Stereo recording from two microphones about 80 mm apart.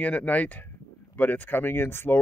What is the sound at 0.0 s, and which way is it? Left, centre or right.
Speech, centre.